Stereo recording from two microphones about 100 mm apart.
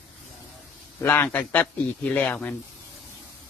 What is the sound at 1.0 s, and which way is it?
A man's voice, 20° left (ahead or behind).